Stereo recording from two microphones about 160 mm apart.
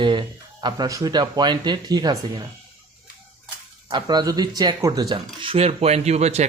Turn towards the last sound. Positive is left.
turn(degrees=-45)  # may be behind; listen again after turning